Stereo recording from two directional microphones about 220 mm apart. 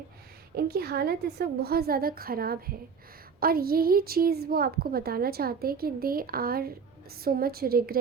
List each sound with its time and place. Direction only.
0.5 s a woman's voice: 45° right (ahead or behind)